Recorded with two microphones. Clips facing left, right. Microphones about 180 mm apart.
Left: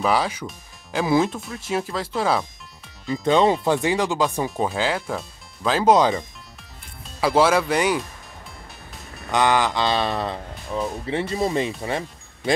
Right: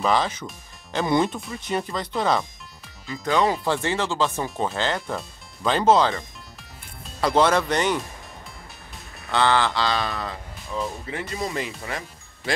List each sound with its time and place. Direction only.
0.0 s speech: 10° left (ahead or behind)
3.1 s speech: 25° left (ahead or behind); by 5.9 s centre (ahead or behind)
5.9 s speech: 15° left (ahead or behind)
7.2 s speech: 5° left (ahead or behind)
9.3 s speech: 15° left (ahead or behind)